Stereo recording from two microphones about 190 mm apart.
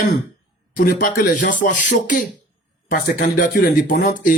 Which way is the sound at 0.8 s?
45° left (ahead or behind).